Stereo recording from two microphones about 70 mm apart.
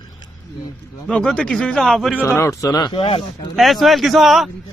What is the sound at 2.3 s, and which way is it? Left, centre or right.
Speech, left.